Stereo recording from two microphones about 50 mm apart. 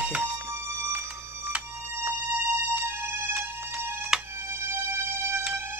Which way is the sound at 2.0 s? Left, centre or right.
Right.